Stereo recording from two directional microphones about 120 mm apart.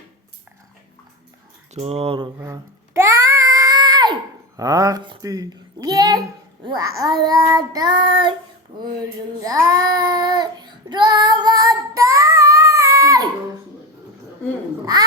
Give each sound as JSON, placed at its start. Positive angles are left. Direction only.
{"t": 1.7, "sound": "speech", "side_deg": -55}
{"t": 2.4, "sound": "a sound", "side_deg": -25}
{"t": 4.5, "sound": "speech", "side_deg": -30}
{"t": 9.4, "sound": "child singing", "side_deg": -30}